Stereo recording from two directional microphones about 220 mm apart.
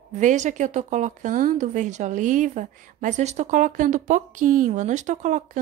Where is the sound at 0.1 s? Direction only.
35° right (ahead or behind).